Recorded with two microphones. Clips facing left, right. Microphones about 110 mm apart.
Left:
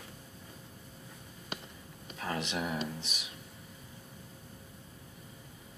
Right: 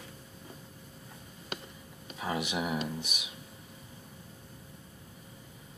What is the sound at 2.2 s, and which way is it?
Speech, 10° right (ahead or behind).